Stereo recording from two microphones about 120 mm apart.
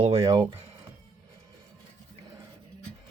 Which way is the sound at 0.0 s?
55° right (ahead or behind).